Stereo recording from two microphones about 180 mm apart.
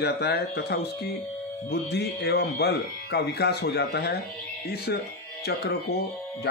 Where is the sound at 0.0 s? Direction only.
65° left (ahead or behind).